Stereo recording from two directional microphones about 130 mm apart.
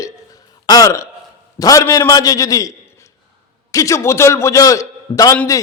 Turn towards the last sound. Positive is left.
turn(degrees=25)  # may be behind; listen again after turning